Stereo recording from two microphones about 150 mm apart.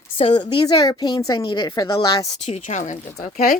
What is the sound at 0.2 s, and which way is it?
A woman's voice, 35° left (ahead or behind).